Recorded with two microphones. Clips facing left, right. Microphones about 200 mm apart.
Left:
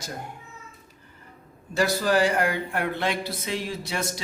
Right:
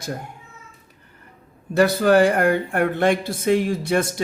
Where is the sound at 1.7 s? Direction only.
55° right (ahead or behind).